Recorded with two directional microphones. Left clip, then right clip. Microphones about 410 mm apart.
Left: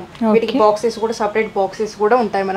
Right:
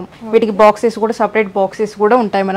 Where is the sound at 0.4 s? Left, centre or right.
Right.